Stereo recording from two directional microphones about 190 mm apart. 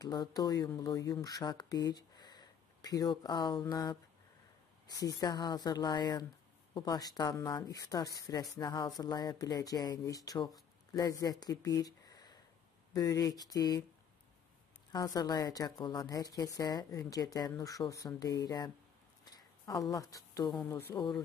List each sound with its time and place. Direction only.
0.0 s speech: 20° left (ahead or behind)
14.9 s speech: 20° left (ahead or behind)